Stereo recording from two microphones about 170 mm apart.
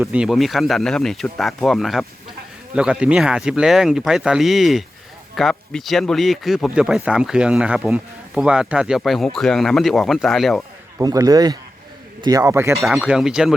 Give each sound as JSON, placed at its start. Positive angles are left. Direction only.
{"t": 0.0, "sound": "speech", "side_deg": -5}
{"t": 10.9, "sound": "a man's voice", "side_deg": -20}
{"t": 12.7, "sound": "speech", "side_deg": 0}